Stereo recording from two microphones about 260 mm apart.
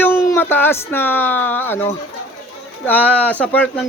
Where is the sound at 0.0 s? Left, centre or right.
Centre.